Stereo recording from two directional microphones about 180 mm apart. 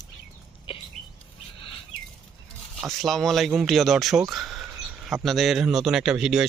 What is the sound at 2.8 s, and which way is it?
A man's voice, centre (ahead or behind).